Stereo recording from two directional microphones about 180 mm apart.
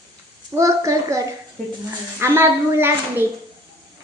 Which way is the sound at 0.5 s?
20° right (ahead or behind).